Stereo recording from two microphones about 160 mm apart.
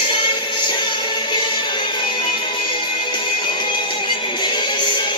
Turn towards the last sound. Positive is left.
turn(degrees=30)  # may be behind; listen again after turning